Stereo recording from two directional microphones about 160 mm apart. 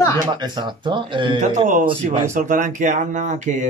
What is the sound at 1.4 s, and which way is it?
Speech, 55° right (ahead or behind).